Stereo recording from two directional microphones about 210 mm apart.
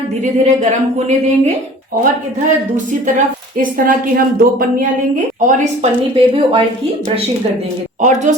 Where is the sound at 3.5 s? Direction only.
40° right (ahead or behind).